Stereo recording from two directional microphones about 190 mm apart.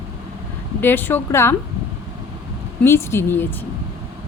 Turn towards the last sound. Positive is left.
turn(degrees=10)  # may be behind; listen again after turning